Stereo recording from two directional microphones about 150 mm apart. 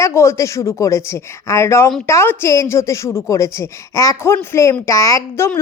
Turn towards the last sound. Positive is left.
turn(degrees=15)  # may be behind; listen again after turning